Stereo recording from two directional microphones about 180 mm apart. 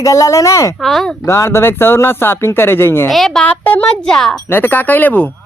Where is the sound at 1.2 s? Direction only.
15° left (ahead or behind).